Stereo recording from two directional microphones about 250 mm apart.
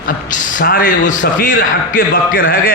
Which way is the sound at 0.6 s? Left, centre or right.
Left.